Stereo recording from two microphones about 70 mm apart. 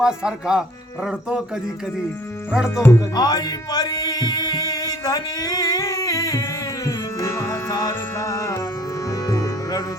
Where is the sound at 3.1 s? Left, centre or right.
Left.